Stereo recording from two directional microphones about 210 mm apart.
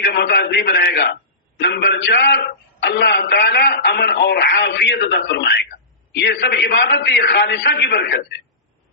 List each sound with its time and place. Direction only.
0.0 s a man's voice: 50° left (ahead or behind)